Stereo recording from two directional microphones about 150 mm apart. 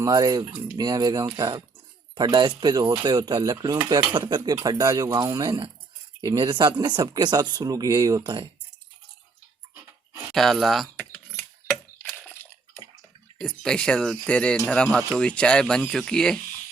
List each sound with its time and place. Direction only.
0.0 s speech: 25° right (ahead or behind)
10.3 s speech: centre (ahead or behind)
10.9 s typing: 15° left (ahead or behind)
11.9 s a sound: 10° left (ahead or behind)
13.4 s speech: 5° left (ahead or behind)